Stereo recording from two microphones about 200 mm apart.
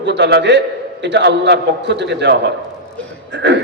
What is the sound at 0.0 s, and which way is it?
A man's voice, 60° right (ahead or behind).